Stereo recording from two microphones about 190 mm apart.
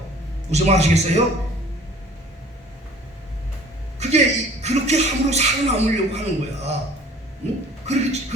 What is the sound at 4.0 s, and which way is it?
Speech, 35° right (ahead or behind).